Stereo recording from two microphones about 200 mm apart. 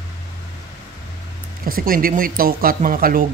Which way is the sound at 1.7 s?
45° right (ahead or behind).